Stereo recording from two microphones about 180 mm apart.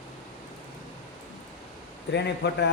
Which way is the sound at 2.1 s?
70° left (ahead or behind).